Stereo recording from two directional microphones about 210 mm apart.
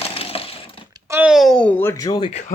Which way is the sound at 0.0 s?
30° left (ahead or behind).